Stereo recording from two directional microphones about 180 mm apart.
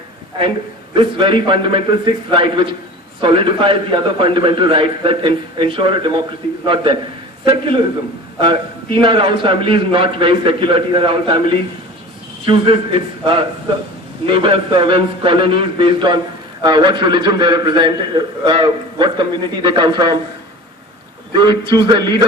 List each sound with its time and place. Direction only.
0.9 s a man's voice: 30° right (ahead or behind)
7.4 s a man's voice: 30° right (ahead or behind)
21.3 s a man's voice: 25° right (ahead or behind)